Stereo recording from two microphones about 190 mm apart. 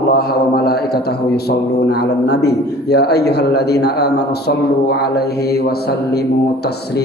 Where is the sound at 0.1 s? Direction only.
55° left (ahead or behind).